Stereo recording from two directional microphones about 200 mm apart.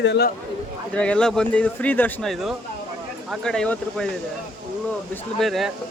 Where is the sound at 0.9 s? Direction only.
5° left (ahead or behind).